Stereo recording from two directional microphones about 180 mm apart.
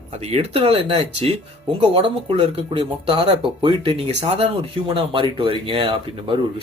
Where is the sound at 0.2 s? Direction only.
30° right (ahead or behind).